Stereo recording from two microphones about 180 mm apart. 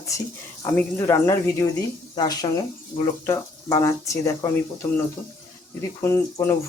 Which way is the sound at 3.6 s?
20° left (ahead or behind).